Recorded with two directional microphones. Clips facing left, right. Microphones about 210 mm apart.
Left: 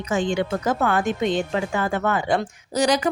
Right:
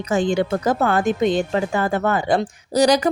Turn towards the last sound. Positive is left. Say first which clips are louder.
# right 4 dB
turn(degrees=-40)  # may be behind; listen again after turning